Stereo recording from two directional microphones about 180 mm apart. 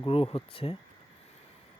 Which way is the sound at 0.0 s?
30° left (ahead or behind).